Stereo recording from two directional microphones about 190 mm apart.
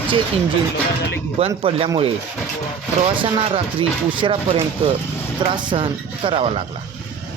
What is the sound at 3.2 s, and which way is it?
Speech, 30° right (ahead or behind).